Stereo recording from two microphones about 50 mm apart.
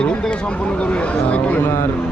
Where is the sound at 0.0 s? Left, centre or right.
Centre.